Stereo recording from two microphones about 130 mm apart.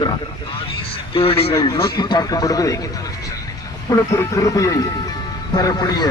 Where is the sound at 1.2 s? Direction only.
45° left (ahead or behind).